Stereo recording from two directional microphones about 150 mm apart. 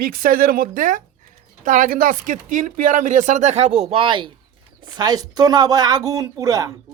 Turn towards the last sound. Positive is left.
turn(degrees=-25)  # may be behind; listen again after turning